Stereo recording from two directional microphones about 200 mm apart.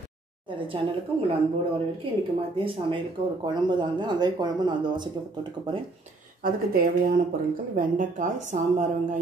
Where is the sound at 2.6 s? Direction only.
25° right (ahead or behind).